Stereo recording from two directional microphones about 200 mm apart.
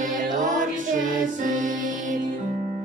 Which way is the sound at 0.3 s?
40° right (ahead or behind).